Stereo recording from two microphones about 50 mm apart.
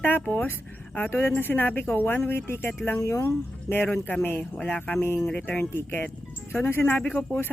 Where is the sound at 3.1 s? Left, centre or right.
Left.